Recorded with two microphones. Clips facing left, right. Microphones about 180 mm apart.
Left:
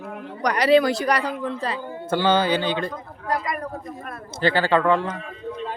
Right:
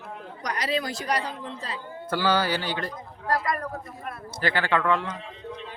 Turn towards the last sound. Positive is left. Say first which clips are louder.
# left 5 dB
turn(degrees=30)  # may be behind; listen again after turning